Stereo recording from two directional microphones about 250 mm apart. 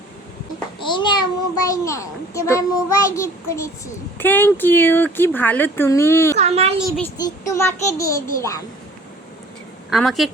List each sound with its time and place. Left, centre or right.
0.8 s a child's voice: centre
6.3 s a child's voice: right
6.7 s a woman's voice: centre
7.2 s speech: centre
9.9 s a woman's voice: centre